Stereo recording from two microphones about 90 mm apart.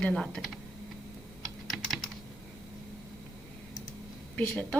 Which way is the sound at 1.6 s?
Centre (ahead or behind).